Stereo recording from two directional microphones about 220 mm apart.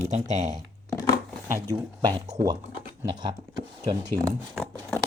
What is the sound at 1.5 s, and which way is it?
Speech, 15° right (ahead or behind).